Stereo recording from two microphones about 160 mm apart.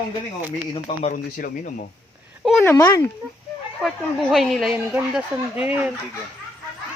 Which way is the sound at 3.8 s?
Centre (ahead or behind).